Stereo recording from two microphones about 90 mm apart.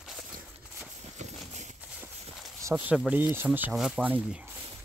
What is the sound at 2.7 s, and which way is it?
Speech, 15° right (ahead or behind).